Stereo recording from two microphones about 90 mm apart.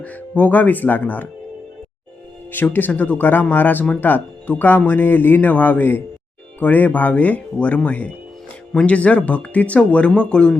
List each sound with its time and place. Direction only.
0.0 s speech: 15° left (ahead or behind)
2.5 s speech: 20° left (ahead or behind)